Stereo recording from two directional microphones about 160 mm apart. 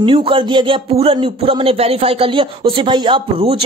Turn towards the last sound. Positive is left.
turn(degrees=-35)  # may be behind; listen again after turning